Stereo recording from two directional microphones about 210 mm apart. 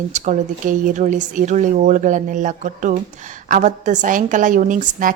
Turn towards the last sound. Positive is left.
turn(degrees=-40)  # may be behind; listen again after turning